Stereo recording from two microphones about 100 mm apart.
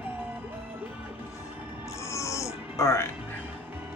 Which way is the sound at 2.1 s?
30° left (ahead or behind).